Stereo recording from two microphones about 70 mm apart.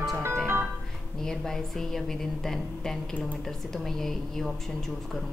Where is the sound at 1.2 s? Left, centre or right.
Centre.